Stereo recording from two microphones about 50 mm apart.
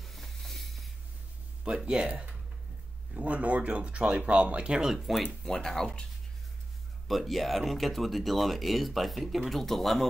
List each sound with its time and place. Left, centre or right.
0.0 s a sound: centre
1.7 s speech: right
3.2 s speech: right; by 5.3 s centre
5.4 s speech: centre
7.1 s speech: centre